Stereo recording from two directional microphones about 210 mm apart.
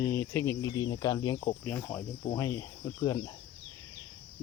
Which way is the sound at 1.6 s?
5° left (ahead or behind).